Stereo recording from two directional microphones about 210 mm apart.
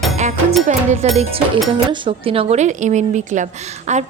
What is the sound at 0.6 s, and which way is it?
Speech, 35° right (ahead or behind).